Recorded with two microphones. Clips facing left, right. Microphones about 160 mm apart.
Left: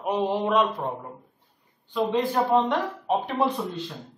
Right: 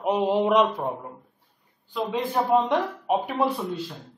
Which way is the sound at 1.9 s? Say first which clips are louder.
Left 3 dB; centre (ahead or behind).